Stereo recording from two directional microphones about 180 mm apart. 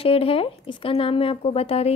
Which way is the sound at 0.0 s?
30° left (ahead or behind).